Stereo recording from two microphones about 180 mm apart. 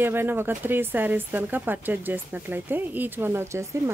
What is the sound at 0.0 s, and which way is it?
Speech, 10° right (ahead or behind).